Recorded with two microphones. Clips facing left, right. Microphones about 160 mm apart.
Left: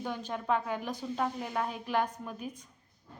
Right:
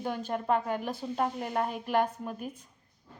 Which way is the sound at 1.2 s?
5° right (ahead or behind).